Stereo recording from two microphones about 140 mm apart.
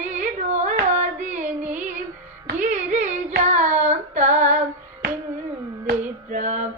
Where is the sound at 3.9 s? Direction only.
55° right (ahead or behind).